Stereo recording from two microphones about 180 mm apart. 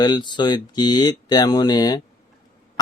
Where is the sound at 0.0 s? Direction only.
25° left (ahead or behind).